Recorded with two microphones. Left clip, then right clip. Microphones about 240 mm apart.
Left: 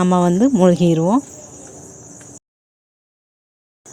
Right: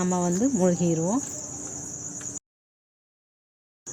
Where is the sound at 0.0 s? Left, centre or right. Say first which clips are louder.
Left 10 dB; left.